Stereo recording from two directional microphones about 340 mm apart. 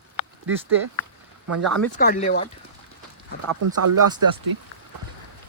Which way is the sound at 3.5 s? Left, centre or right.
Right.